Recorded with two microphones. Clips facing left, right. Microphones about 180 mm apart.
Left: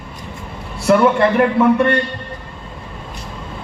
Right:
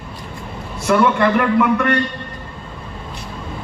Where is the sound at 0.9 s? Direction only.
35° left (ahead or behind).